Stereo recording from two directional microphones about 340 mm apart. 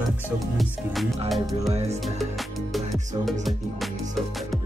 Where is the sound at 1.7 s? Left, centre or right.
Centre.